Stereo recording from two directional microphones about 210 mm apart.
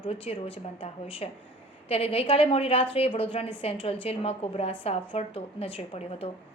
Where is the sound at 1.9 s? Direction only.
25° left (ahead or behind).